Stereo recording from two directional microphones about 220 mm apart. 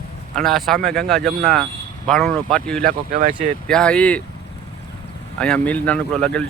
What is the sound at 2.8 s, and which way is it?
Speech, 40° right (ahead or behind).